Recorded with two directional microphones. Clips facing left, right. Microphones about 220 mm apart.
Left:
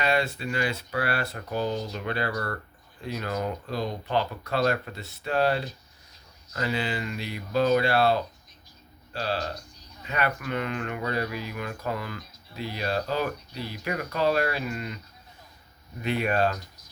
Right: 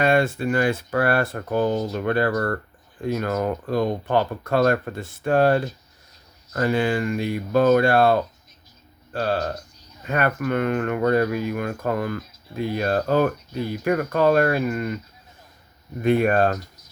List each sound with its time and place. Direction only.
0.0 s speech: 50° right (ahead or behind)
16.0 s speech: 50° right (ahead or behind)